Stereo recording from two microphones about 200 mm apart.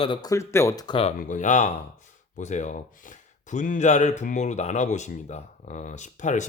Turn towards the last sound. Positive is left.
turn(degrees=35)  # may be behind; listen again after turning